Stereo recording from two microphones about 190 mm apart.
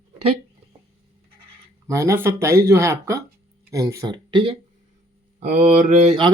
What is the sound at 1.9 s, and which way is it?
Speech, 15° right (ahead or behind).